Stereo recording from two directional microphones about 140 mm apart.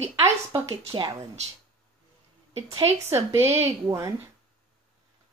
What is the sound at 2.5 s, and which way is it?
Speech, 50° right (ahead or behind).